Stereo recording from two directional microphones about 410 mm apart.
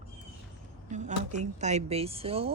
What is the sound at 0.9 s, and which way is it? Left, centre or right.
A woman's voice, centre.